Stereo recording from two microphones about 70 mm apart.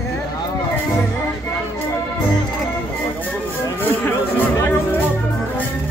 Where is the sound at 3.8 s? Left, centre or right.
Left.